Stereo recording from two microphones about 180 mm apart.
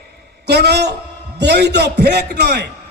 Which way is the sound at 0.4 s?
65° right (ahead or behind).